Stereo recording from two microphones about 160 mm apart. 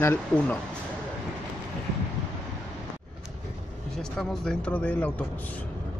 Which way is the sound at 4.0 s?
5° left (ahead or behind).